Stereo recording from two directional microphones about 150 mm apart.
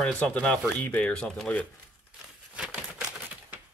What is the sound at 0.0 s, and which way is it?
Speech, 10° left (ahead or behind).